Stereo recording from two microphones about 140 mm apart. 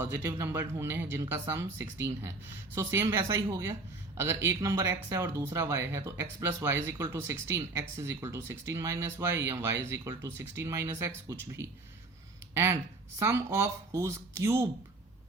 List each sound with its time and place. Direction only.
0.3 s speech: 20° right (ahead or behind)
13.1 s speech: 20° right (ahead or behind)